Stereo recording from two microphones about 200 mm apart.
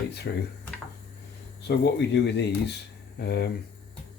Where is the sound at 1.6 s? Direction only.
55° left (ahead or behind).